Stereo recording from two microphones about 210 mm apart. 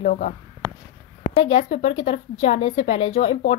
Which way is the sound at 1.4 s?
25° left (ahead or behind).